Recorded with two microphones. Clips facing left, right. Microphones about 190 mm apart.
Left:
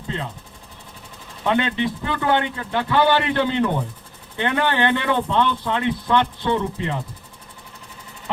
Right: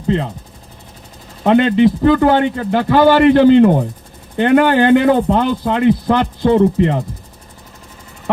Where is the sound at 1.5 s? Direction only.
40° right (ahead or behind).